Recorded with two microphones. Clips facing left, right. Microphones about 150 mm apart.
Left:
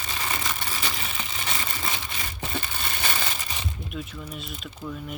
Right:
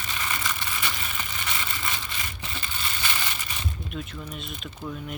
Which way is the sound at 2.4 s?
55° left (ahead or behind).